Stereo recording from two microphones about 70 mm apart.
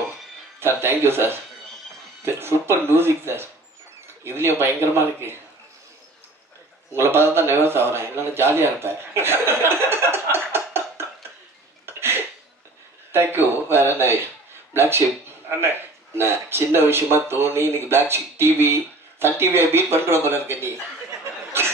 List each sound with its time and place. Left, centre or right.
0.6 s speech: right
6.9 s speech: right
11.8 s a sound: right
13.1 s speech: right